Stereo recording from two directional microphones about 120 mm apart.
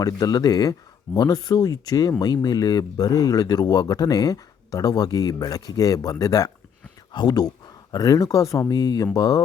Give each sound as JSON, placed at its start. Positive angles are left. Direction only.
{"t": 0.0, "sound": "speech", "side_deg": 30}